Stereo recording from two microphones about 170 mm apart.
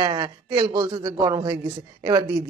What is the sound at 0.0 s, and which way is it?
A woman's voice, 25° right (ahead or behind).